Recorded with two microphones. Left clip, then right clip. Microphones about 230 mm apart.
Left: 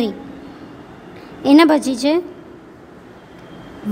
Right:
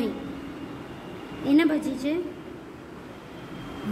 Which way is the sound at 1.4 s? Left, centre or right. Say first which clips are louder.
Left 11 dB; left.